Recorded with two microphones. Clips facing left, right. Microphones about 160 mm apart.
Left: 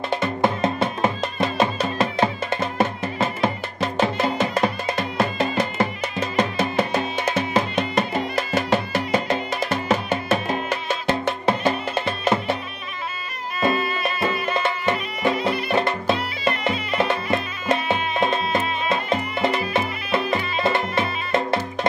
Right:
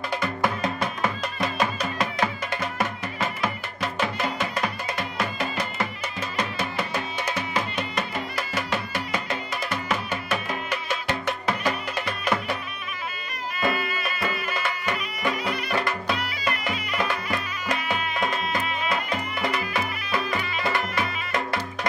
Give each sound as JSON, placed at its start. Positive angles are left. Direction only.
{"t": 0.1, "sound": "music", "side_deg": 25}
{"t": 13.6, "sound": "music", "side_deg": 25}